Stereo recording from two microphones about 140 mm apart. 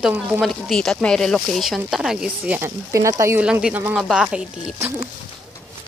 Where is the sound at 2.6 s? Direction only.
20° right (ahead or behind).